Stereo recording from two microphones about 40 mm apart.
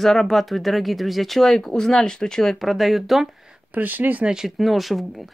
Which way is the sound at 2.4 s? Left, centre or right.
Centre.